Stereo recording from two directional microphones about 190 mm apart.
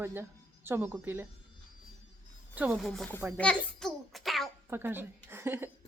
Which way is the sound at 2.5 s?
10° right (ahead or behind).